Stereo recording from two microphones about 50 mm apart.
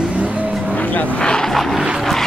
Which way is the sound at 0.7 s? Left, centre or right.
Left.